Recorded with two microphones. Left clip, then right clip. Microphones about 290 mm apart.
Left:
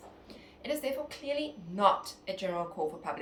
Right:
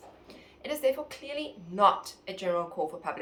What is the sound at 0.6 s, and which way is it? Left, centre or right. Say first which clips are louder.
A woman's voice: right 5 dB; centre.